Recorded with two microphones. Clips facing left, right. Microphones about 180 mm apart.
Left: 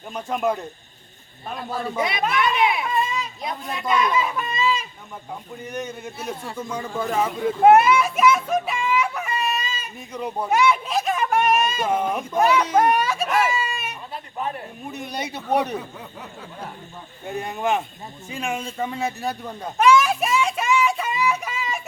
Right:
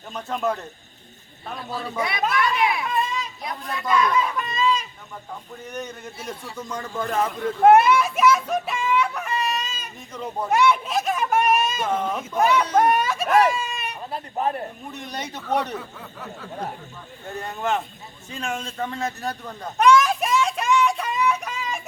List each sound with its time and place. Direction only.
0.1 s speech: 10° left (ahead or behind)
2.0 s speech: 20° left (ahead or behind)
2.9 s children playing: 5° left (ahead or behind)
3.7 s speech: 20° left (ahead or behind)
4.1 s a child's voice: 5° left (ahead or behind)
10.5 s a sound: centre (ahead or behind)
11.9 s speech: 10° left (ahead or behind)
12.4 s speech: centre (ahead or behind)
12.6 s a sound: 5° left (ahead or behind)
14.1 s speech: 40° right (ahead or behind)
14.9 s speech: 10° left (ahead or behind)
17.2 s speech: 15° left (ahead or behind)
18.3 s a sound: 10° left (ahead or behind)